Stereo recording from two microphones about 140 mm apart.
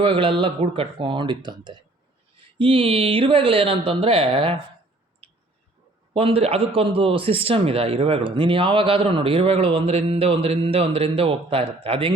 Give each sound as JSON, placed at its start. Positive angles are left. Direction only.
{"t": 0.0, "sound": "a man's voice", "side_deg": -40}
{"t": 6.1, "sound": "a man's voice", "side_deg": -45}